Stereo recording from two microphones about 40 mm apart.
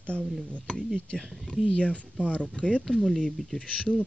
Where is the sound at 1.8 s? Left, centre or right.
Left.